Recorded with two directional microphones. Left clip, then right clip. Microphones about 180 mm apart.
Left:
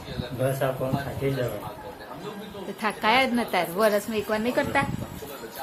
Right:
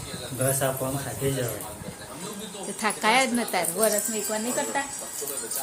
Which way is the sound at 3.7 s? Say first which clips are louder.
Left 4 dB; 15° left (ahead or behind).